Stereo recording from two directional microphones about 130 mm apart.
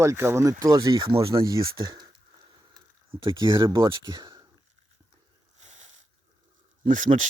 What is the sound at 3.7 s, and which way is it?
Speech, 40° right (ahead or behind).